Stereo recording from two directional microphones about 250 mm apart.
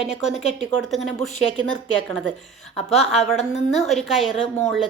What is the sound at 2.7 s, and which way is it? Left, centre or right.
Speech, left.